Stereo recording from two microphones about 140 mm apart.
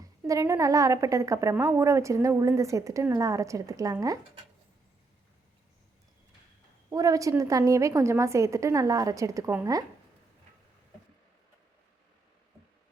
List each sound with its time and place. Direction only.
0.3 s a woman's voice: 20° right (ahead or behind)
6.9 s a woman's voice: 25° right (ahead or behind)